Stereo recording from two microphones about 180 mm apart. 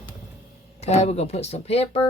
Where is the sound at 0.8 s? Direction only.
35° left (ahead or behind).